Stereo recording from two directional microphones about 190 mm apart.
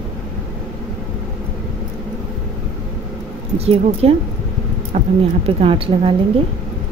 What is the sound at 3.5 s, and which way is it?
Speech, 30° right (ahead or behind).